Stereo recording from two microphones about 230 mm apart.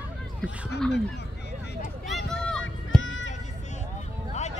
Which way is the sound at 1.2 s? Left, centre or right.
Left.